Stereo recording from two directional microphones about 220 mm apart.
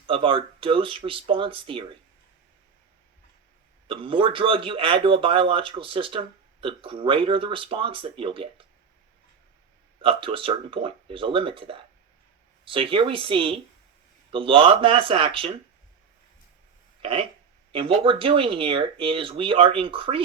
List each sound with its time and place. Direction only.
0.1 s speech: 25° right (ahead or behind)
3.8 s speech: 25° right (ahead or behind)
10.0 s speech: 25° right (ahead or behind)
17.0 s speech: 25° right (ahead or behind)